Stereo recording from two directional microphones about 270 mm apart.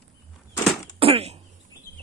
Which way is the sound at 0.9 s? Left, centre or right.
Right.